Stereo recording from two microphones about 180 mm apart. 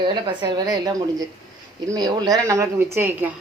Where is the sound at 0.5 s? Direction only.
20° right (ahead or behind).